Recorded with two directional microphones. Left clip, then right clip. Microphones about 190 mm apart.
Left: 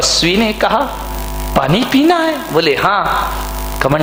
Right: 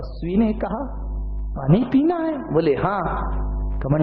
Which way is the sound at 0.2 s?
10° left (ahead or behind).